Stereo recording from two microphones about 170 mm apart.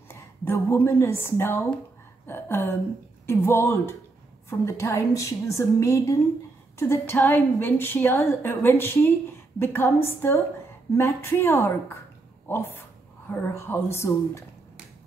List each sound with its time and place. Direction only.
0.1 s a woman's voice: 15° left (ahead or behind)